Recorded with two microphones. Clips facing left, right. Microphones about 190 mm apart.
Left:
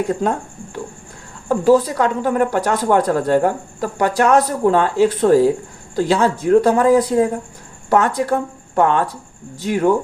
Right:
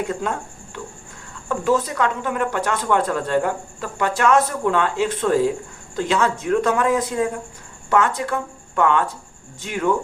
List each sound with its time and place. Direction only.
0.1 s speech: 35° left (ahead or behind)